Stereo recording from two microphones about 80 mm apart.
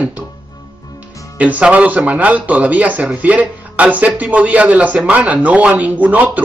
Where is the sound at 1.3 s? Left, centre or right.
Centre.